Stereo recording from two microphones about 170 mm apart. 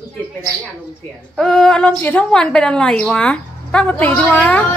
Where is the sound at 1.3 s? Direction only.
5° left (ahead or behind).